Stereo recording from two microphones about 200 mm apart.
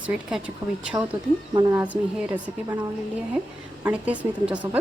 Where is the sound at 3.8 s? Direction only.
5° right (ahead or behind).